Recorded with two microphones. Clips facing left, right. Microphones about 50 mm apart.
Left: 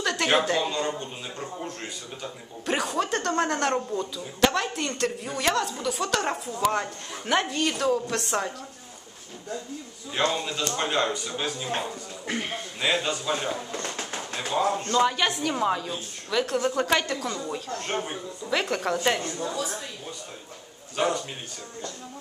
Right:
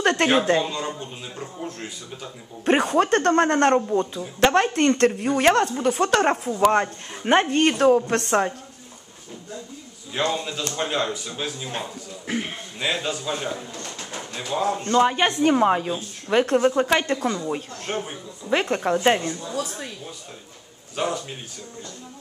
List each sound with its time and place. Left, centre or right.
0.0 s speech: right
0.7 s a sound: centre
2.6 s a woman's voice: right
10.1 s a man's voice: centre
14.8 s a woman's voice: right
16.7 s a woman's voice: right
18.5 s speech: right
20.9 s a man's voice: centre